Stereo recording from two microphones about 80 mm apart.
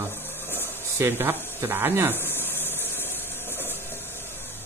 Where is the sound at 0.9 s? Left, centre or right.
Right.